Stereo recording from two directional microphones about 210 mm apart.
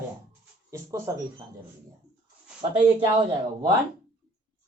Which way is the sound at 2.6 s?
20° right (ahead or behind).